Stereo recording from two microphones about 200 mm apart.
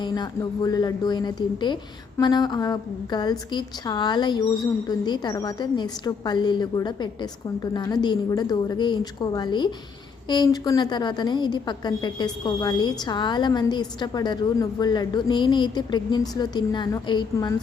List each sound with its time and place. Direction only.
0.0 s a woman's voice: 20° left (ahead or behind)